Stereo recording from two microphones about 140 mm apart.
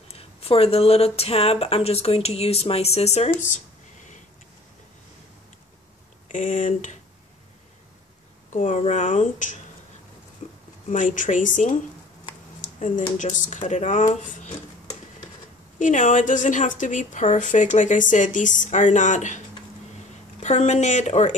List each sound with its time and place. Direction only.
0.1 s speech: 45° left (ahead or behind); by 4.2 s 60° left (ahead or behind)
6.3 s speech: 65° left (ahead or behind)
8.5 s speech: 60° left (ahead or behind)
10.4 s a sound: 55° left (ahead or behind)
10.9 s speech: 65° left (ahead or behind)
12.6 s a sound: 65° left (ahead or behind)
13.2 s speech: 60° left (ahead or behind)
15.8 s speech: 65° left (ahead or behind)
20.4 s speech: 55° left (ahead or behind)